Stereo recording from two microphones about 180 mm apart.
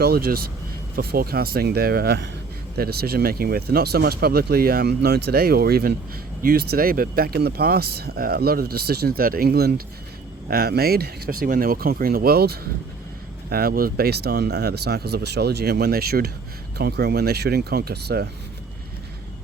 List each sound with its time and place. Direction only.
0.0 s speech: 55° right (ahead or behind)